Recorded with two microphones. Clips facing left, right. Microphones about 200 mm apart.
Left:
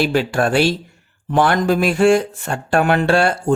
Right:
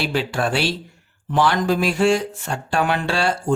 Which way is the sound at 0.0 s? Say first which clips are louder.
Left 5 dB; 50° left (ahead or behind).